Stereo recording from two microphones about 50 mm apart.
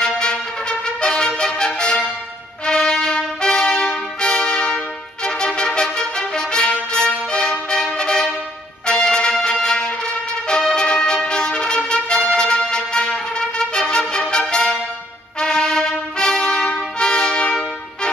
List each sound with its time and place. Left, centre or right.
0.0 s trumpet: centre
2.6 s music: centre
15.3 s trumpet: centre